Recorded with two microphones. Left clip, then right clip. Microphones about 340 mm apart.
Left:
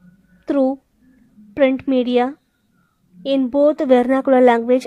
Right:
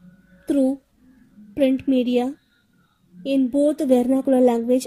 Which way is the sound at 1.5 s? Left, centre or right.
Left.